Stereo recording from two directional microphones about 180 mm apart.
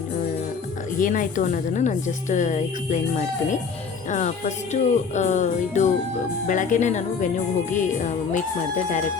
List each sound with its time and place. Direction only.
0.9 s a woman's voice: 45° left (ahead or behind)
4.1 s music: 45° left (ahead or behind)
6.5 s a woman's voice: 45° left (ahead or behind)